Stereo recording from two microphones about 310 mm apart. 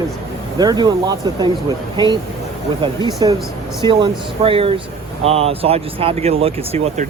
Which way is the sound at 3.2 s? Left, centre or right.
Centre.